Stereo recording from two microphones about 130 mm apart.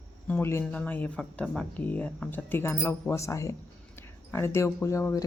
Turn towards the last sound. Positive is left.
turn(degrees=20)  # may be behind; listen again after turning